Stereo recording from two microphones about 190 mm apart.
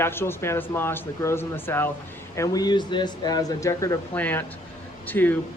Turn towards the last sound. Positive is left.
turn(degrees=10)  # may be behind; listen again after turning